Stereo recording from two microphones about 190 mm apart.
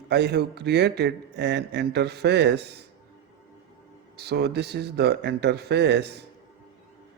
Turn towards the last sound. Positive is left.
turn(degrees=-60)  # may be behind; listen again after turning